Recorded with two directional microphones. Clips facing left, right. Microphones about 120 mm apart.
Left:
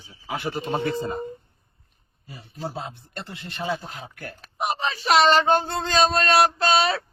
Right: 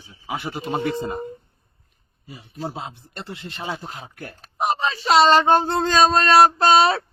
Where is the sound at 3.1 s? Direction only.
20° right (ahead or behind).